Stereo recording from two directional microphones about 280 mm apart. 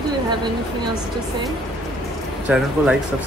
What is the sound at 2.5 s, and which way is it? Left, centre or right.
Speech, centre.